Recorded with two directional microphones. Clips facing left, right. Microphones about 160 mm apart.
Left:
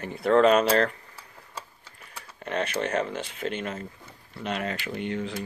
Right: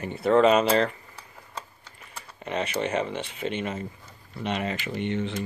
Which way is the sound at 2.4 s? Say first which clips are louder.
Even; 5° right (ahead or behind).